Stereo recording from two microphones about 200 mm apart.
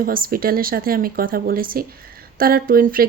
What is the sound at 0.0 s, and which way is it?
A woman's voice, 45° right (ahead or behind).